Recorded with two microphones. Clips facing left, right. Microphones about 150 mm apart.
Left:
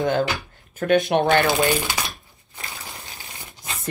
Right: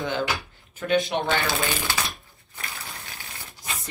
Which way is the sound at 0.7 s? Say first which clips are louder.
Left 5 dB; 50° left (ahead or behind).